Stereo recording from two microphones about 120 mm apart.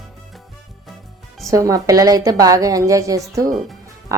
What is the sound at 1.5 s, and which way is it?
A woman's voice, 30° right (ahead or behind).